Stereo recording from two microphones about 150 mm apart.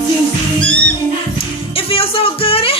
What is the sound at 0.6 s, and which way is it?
Music, 5° left (ahead or behind).